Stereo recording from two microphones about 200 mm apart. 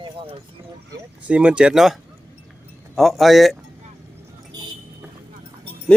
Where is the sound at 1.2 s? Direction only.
5° right (ahead or behind).